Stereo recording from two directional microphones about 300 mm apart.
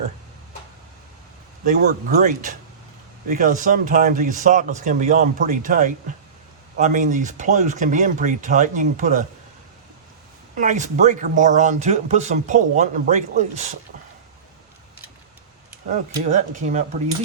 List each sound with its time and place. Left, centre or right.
1.6 s speech: right
10.6 s speech: right
16.3 s speech: right